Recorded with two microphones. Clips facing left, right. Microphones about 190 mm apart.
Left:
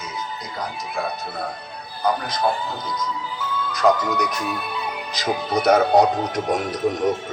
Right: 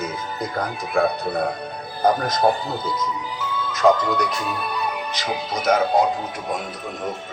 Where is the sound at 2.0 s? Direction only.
45° right (ahead or behind).